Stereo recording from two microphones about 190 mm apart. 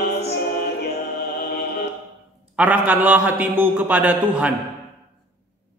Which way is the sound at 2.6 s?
10° right (ahead or behind).